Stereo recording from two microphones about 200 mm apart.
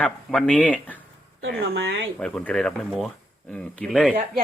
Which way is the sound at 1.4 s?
55° right (ahead or behind).